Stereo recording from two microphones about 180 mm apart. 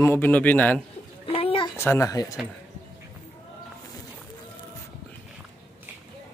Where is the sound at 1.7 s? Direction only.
15° left (ahead or behind).